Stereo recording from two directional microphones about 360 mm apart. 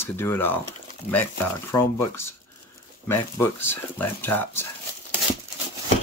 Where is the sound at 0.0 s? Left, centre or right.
Centre.